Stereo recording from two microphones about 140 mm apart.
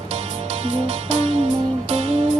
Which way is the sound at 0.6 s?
45° right (ahead or behind).